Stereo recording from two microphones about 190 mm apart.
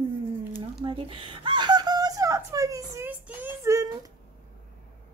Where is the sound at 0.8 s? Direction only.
25° right (ahead or behind).